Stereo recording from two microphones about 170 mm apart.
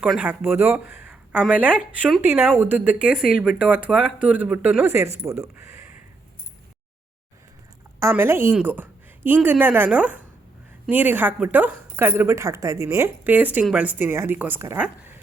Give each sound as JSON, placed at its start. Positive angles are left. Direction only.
{"t": 0.0, "sound": "speech", "side_deg": -10}
{"t": 7.9, "sound": "a woman's voice", "side_deg": -15}